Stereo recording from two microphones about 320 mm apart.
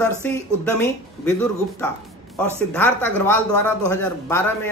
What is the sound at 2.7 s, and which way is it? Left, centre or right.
Speech, centre.